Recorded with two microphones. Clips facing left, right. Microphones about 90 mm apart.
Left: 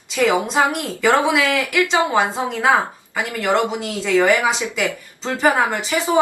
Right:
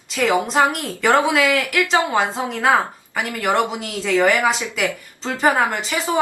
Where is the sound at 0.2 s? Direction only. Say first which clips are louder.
Even; 15° left (ahead or behind).